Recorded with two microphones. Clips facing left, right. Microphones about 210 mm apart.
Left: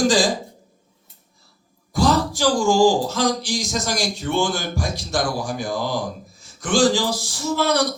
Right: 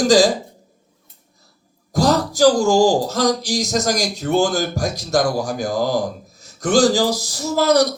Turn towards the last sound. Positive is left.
turn(degrees=-40)  # may be behind; listen again after turning